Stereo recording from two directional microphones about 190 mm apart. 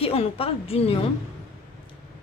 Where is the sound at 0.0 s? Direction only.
30° left (ahead or behind).